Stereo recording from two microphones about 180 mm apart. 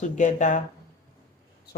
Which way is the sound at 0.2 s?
45° left (ahead or behind).